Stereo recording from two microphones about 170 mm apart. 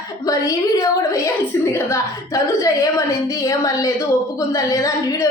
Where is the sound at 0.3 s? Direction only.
20° left (ahead or behind).